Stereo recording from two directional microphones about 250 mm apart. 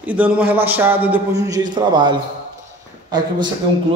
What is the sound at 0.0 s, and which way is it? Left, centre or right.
A man's voice, centre.